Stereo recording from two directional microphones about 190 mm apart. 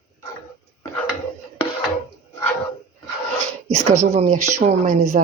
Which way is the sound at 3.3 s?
35° right (ahead or behind).